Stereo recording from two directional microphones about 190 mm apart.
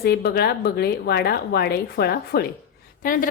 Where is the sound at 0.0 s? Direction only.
55° left (ahead or behind).